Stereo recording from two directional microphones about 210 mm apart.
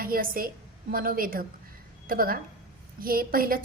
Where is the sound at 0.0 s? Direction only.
45° right (ahead or behind).